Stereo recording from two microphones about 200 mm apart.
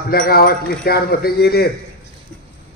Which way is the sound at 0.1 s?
50° left (ahead or behind).